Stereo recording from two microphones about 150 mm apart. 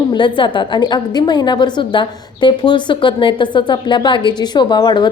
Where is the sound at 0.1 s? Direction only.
30° left (ahead or behind).